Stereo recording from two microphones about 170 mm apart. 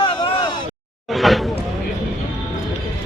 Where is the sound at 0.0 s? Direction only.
30° left (ahead or behind).